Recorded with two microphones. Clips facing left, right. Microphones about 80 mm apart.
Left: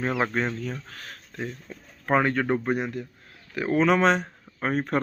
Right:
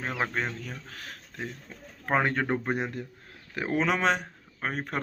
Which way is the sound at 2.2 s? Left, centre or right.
Centre.